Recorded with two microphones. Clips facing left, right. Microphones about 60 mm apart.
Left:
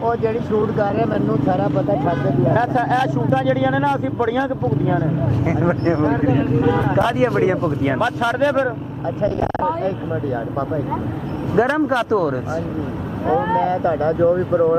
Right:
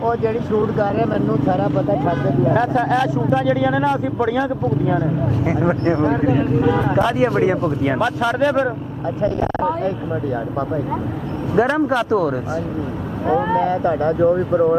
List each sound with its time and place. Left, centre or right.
0.0 s speech: right
11.5 s speech: centre